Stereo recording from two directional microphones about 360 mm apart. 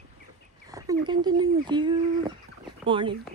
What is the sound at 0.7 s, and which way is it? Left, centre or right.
Speech, centre.